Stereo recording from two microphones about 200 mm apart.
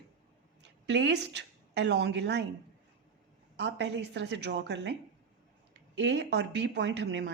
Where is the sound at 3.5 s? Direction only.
60° right (ahead or behind).